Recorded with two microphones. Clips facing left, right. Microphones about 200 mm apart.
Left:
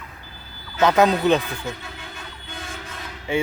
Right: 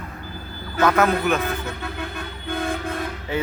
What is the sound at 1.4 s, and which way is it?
Toot, 60° right (ahead or behind).